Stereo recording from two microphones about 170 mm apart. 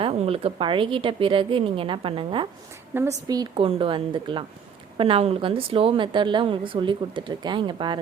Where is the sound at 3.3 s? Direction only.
30° right (ahead or behind).